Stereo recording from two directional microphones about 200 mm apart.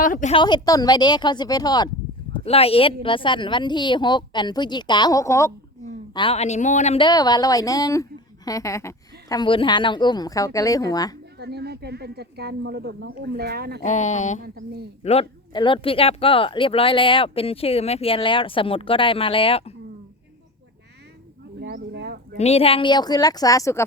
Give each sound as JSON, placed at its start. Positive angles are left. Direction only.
{"t": 0.0, "sound": "speech", "side_deg": 40}
{"t": 0.3, "sound": "speech", "side_deg": 20}
{"t": 6.1, "sound": "a woman's voice", "side_deg": 30}
{"t": 11.3, "sound": "speech", "side_deg": -55}
{"t": 13.8, "sound": "speech", "side_deg": 35}
{"t": 14.4, "sound": "speech", "side_deg": -50}
{"t": 15.0, "sound": "speech", "side_deg": 30}
{"t": 21.6, "sound": "a sound", "side_deg": -55}
{"t": 22.4, "sound": "speech", "side_deg": 30}